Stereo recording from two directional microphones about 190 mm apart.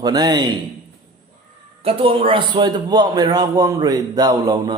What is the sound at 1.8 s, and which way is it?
A man's voice, 30° right (ahead or behind).